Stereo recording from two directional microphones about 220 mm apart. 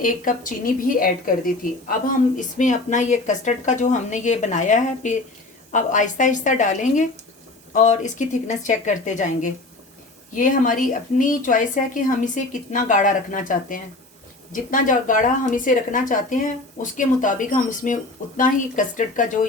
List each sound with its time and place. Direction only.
0.0 s a woman's voice: 35° left (ahead or behind)